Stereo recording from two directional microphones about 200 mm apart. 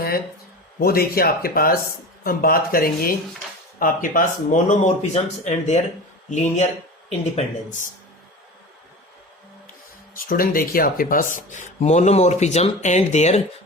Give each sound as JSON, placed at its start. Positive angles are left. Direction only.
{"t": 0.8, "sound": "speech", "side_deg": 50}
{"t": 10.2, "sound": "speech", "side_deg": 45}